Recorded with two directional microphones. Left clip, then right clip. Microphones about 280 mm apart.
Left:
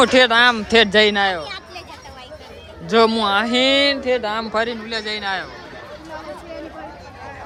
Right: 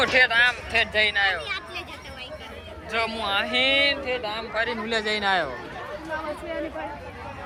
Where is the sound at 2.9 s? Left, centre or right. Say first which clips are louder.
Left 10 dB; left.